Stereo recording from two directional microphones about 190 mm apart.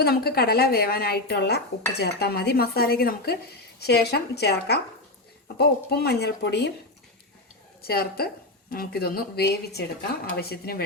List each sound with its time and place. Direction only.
0.0 s speech: 55° left (ahead or behind)
7.8 s a woman's voice: 55° left (ahead or behind)